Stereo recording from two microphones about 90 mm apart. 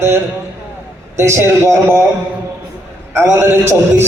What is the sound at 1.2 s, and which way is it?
Speech, 30° right (ahead or behind).